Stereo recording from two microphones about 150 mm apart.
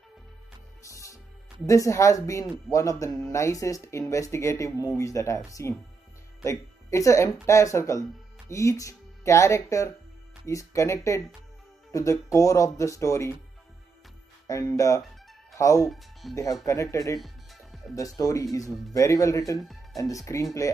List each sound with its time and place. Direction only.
0.8 s music: 20° left (ahead or behind)
1.7 s speech: 20° left (ahead or behind)
14.5 s speech: 20° left (ahead or behind)
15.9 s speech: centre (ahead or behind)
16.6 s speech: 20° left (ahead or behind)
17.2 s music: centre (ahead or behind)
17.9 s speech: 25° left (ahead or behind)
19.6 s music: centre (ahead or behind)
20.0 s speech: 20° left (ahead or behind)